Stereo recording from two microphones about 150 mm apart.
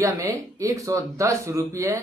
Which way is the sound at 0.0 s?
20° right (ahead or behind).